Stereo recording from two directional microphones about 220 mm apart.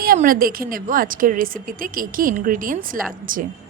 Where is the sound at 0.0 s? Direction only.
40° right (ahead or behind).